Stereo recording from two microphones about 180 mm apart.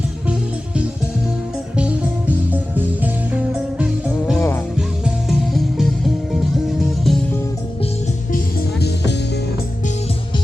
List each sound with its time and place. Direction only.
2.5 s music: 10° right (ahead or behind)
4.4 s music: 15° left (ahead or behind)
5.0 s music: centre (ahead or behind)
8.3 s music: 60° left (ahead or behind)